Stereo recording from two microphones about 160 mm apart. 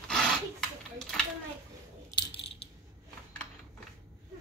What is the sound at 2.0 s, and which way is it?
Coin, 30° left (ahead or behind).